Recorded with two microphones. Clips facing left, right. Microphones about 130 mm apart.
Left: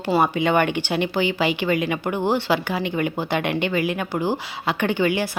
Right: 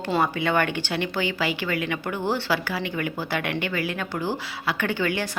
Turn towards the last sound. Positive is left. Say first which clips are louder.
# left 5 dB
turn(degrees=15)  # may be behind; listen again after turning